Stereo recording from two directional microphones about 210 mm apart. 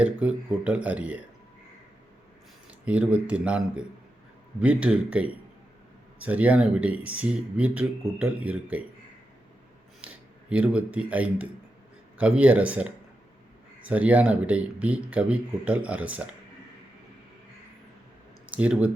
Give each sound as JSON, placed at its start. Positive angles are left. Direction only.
{"t": 0.0, "sound": "speech", "side_deg": -5}
{"t": 2.6, "sound": "speech", "side_deg": -5}
{"t": 10.5, "sound": "speech", "side_deg": -5}
{"t": 18.4, "sound": "speech", "side_deg": -5}